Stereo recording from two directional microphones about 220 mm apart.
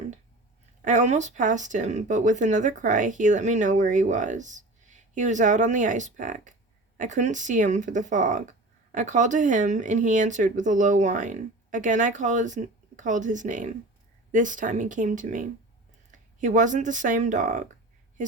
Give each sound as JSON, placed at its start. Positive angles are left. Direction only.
{"t": 0.9, "sound": "speech", "side_deg": -30}